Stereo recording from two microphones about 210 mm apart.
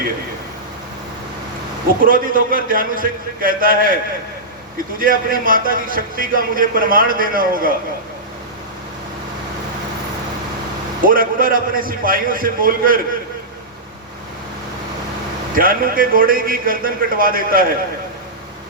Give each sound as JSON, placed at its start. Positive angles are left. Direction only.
{"t": 2.0, "sound": "a man's voice", "side_deg": -40}
{"t": 4.9, "sound": "a man's voice", "side_deg": -40}
{"t": 11.0, "sound": "a man's voice", "side_deg": -40}
{"t": 15.5, "sound": "a man's voice", "side_deg": -45}